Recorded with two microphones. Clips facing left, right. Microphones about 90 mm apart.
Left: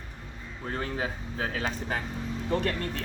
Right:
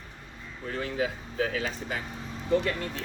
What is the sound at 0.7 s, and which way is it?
Speech, 40° left (ahead or behind).